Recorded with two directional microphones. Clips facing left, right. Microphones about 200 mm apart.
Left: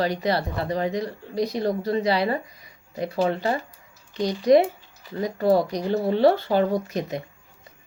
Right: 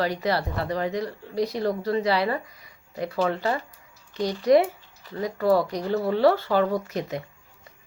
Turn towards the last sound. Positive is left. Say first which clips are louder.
# left 2 dB
turn(degrees=15)  # may be behind; listen again after turning